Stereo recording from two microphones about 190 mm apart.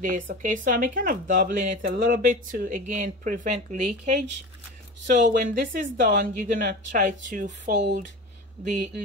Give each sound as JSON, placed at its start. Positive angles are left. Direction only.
{"t": 0.1, "sound": "speech", "side_deg": -45}